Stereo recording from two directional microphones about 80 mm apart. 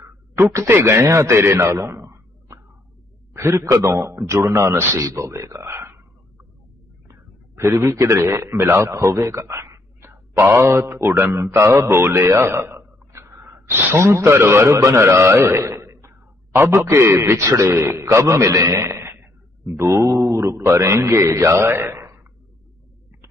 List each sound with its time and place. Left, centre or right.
0.0 s a man's voice: right
7.1 s a man's voice: right
19.8 s a man's voice: right